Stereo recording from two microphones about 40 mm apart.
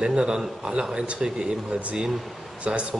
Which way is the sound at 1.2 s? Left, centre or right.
Centre.